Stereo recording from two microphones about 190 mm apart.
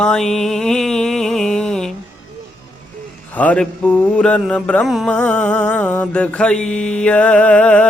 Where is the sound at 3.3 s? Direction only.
5° left (ahead or behind).